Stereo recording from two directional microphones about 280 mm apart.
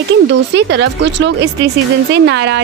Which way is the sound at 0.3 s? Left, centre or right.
Right.